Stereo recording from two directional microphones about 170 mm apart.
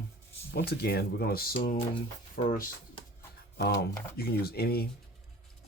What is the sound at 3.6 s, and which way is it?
Speech, 80° left.